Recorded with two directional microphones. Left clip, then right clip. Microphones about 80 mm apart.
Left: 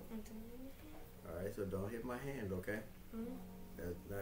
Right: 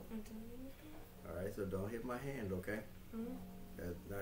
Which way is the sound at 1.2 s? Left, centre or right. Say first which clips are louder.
Even; right.